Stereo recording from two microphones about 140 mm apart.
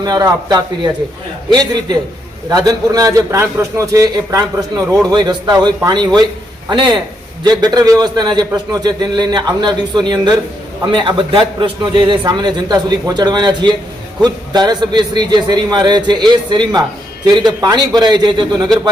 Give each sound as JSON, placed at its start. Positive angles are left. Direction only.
{"t": 0.0, "sound": "a man's voice", "side_deg": -25}